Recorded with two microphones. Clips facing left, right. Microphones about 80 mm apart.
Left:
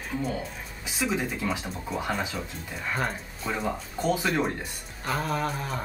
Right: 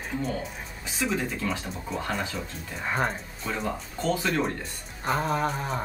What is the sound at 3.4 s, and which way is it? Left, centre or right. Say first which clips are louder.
Speech: left 1 dB; centre.